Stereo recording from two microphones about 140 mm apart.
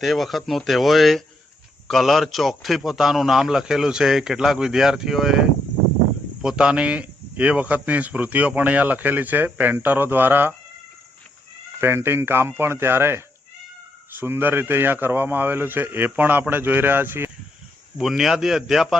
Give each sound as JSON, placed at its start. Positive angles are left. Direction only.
{"t": 0.0, "sound": "a man's voice", "side_deg": 0}
{"t": 11.8, "sound": "speech", "side_deg": -15}
{"t": 17.9, "sound": "a man's voice", "side_deg": 0}